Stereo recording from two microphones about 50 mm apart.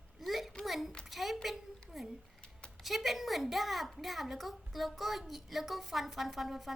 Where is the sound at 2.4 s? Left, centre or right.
Centre.